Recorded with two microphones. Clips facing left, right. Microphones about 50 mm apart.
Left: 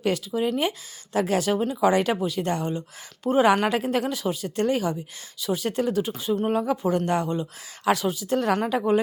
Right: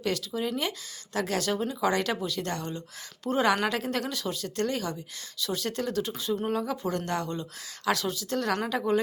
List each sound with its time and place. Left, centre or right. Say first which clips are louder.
0.0 s speech: left 5 dB; centre